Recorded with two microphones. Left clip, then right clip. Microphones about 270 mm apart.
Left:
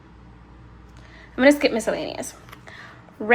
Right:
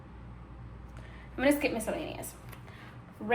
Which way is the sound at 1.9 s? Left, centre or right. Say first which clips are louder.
Left 9 dB; left.